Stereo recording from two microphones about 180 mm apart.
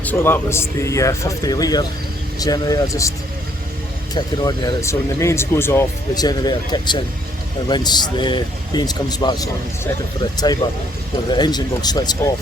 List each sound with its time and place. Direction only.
0.0 s a man's voice: 10° left (ahead or behind)
4.1 s a man's voice: 20° left (ahead or behind)